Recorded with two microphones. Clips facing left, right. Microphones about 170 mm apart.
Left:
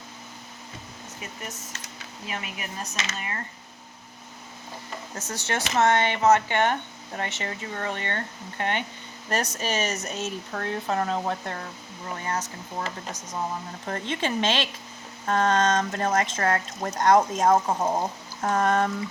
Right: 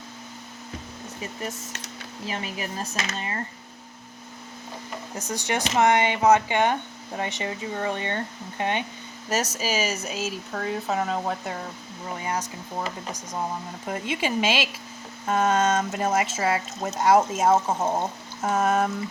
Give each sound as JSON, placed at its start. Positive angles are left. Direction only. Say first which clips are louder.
{"t": 2.2, "sound": "speech", "louder": "right 4 dB", "side_deg": -30}
{"t": 5.3, "sound": "speech", "louder": "right 2 dB", "side_deg": -15}
{"t": 9.3, "sound": "speech", "louder": "right 1 dB", "side_deg": -5}
{"t": 13.8, "sound": "speech", "louder": "right 1 dB", "side_deg": -10}